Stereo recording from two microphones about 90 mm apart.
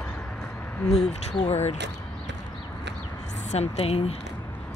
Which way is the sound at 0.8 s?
10° left (ahead or behind).